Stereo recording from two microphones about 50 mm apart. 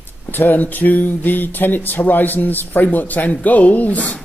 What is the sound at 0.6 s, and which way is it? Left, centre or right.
Speech, left.